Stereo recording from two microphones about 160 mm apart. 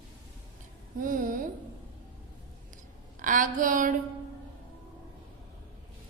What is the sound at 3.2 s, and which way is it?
Speech, 55° right (ahead or behind).